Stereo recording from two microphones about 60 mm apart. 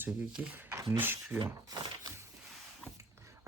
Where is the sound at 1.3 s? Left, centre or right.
Right.